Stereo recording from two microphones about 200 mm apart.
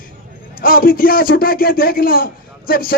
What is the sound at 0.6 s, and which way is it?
Speech, 45° left (ahead or behind).